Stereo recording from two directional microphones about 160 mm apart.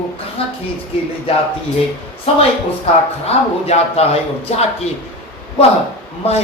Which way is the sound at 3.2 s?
40° left (ahead or behind).